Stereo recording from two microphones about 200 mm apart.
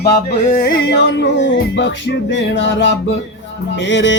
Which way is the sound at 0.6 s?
55° left (ahead or behind).